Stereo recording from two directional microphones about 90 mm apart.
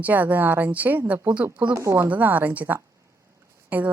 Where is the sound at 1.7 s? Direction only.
35° right (ahead or behind).